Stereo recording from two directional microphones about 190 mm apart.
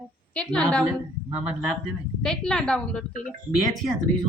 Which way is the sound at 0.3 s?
5° left (ahead or behind).